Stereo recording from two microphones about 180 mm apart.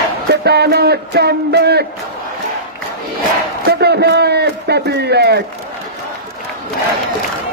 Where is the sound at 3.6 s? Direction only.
70° right (ahead or behind).